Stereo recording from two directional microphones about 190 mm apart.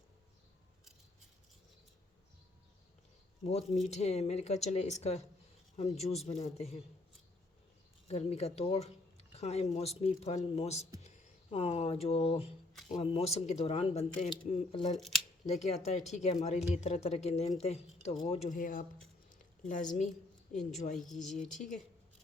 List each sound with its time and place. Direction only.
3.4 s speech: 35° left (ahead or behind)
8.0 s speech: 35° left (ahead or behind)
14.9 s speech: centre (ahead or behind)
15.6 s speech: 35° left (ahead or behind)
18.4 s speech: 45° left (ahead or behind)
19.3 s a sound: 40° left (ahead or behind)
20.5 s speech: 40° left (ahead or behind)
20.9 s speech: centre (ahead or behind)
21.6 s speech: 45° left (ahead or behind)